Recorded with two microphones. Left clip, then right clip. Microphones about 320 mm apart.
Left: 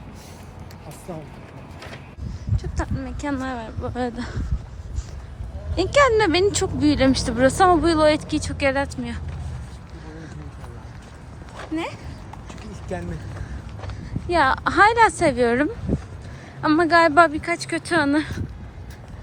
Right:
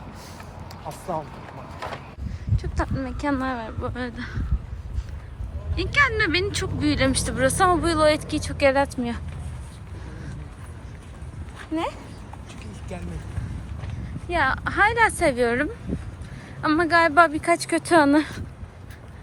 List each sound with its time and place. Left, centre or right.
0.9 s speech: centre
2.6 s speech: centre
5.7 s speech: centre
11.7 s speech: centre
14.3 s speech: centre